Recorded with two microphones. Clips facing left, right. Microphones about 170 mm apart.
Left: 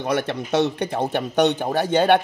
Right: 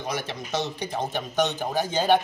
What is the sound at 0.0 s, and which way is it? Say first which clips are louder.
A man's voice: left 8 dB; 60° left (ahead or behind).